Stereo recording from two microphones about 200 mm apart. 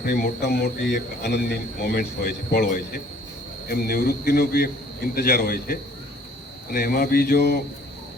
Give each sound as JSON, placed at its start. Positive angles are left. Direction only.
{"t": 0.0, "sound": "speech", "side_deg": 50}